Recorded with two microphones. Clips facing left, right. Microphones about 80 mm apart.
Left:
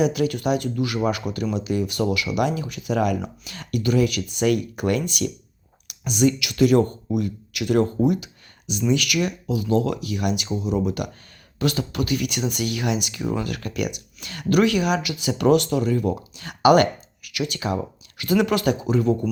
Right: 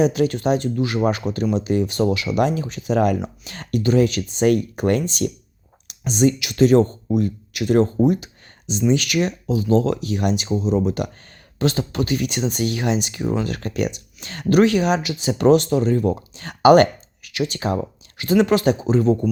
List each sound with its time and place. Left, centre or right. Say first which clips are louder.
0.0 s speech: right 3 dB; right